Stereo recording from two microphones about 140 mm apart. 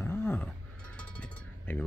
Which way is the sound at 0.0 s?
15° left (ahead or behind).